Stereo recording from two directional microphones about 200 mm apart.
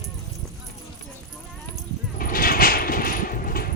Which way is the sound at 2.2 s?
45° left (ahead or behind).